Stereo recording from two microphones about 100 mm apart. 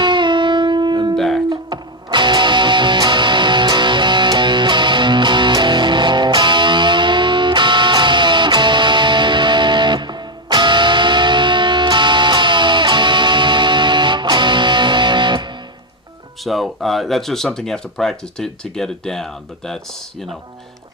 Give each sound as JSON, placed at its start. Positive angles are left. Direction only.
{"t": 0.0, "sound": "music", "side_deg": -50}
{"t": 1.1, "sound": "music", "side_deg": 5}
{"t": 1.5, "sound": "music", "side_deg": -50}
{"t": 16.4, "sound": "speech", "side_deg": 0}